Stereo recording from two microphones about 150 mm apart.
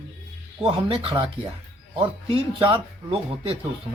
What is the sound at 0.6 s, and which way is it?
Speech, 35° right (ahead or behind).